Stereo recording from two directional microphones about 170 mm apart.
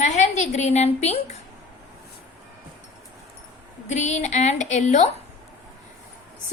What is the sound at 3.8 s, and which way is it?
Speech, 45° left (ahead or behind).